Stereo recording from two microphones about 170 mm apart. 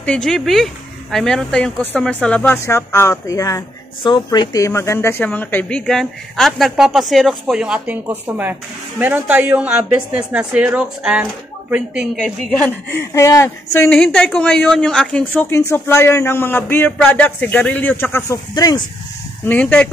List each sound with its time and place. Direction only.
0.0 s a woman's voice: 5° left (ahead or behind)
12.9 s a woman's voice: 15° left (ahead or behind)
13.8 s a woman's voice: 5° left (ahead or behind); by 18.8 s 20° left (ahead or behind)
19.4 s a woman's voice: 10° left (ahead or behind)